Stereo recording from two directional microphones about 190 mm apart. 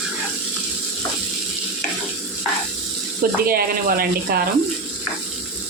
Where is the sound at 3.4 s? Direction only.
50° right (ahead or behind).